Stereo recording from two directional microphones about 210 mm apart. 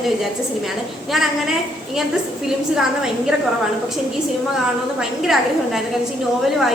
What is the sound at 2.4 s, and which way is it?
Speech, centre (ahead or behind).